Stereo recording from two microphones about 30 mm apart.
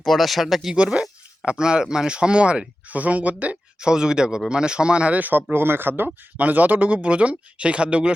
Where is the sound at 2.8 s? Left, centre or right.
Right.